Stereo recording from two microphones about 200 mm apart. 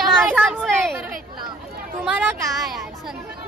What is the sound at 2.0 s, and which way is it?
Speech, 10° right (ahead or behind).